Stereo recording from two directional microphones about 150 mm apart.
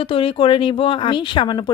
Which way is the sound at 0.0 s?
35° left (ahead or behind).